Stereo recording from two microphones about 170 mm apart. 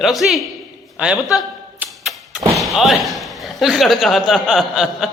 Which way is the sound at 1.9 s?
Centre (ahead or behind).